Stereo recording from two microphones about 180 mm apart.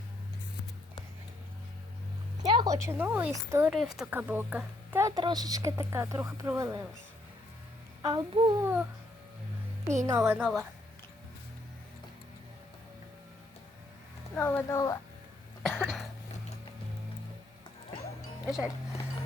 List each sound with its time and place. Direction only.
2.4 s speech: 25° right (ahead or behind)
8.0 s speech: 25° right (ahead or behind)
8.6 s speech: 10° right (ahead or behind)
10.3 s a woman's voice: 5° right (ahead or behind)
14.3 s speech: 10° left (ahead or behind)
15.6 s cough: centre (ahead or behind)